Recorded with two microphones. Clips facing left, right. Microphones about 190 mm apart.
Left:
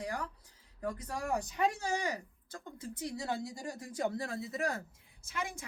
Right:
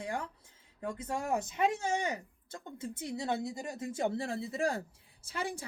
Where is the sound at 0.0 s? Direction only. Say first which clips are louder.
Right 1 dB; 25° right (ahead or behind).